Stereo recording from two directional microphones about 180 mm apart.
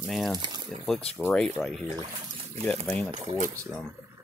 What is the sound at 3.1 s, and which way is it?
Speech, 40° right (ahead or behind).